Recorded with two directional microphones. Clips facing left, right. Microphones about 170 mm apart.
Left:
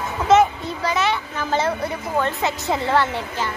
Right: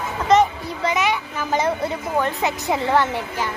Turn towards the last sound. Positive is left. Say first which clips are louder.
# right 1 dB
turn(degrees=-15)  # may be behind; listen again after turning